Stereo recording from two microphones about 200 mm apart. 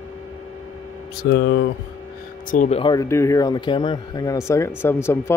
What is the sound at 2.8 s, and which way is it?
Speech, 20° left (ahead or behind).